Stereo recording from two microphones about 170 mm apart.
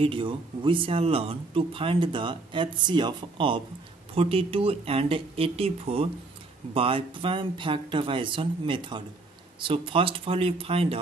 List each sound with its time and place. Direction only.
0.0 s speech: 30° right (ahead or behind)